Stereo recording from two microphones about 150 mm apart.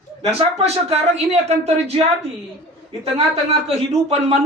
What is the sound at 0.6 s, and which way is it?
Speech, 45° right (ahead or behind).